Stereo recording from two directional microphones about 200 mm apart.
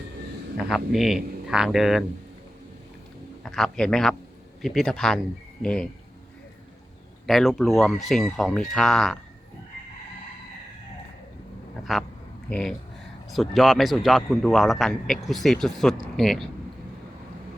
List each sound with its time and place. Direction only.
0.5 s a man's voice: centre (ahead or behind)
3.4 s a man's voice: centre (ahead or behind)
7.3 s a man's voice: centre (ahead or behind)
11.9 s a man's voice: centre (ahead or behind)